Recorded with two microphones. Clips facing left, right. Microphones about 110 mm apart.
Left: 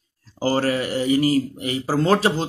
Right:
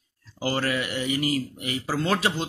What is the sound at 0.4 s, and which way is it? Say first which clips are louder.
Speech: left 6 dB; 35° left (ahead or behind).